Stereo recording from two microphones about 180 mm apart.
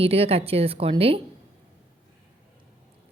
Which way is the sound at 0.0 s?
35° right (ahead or behind).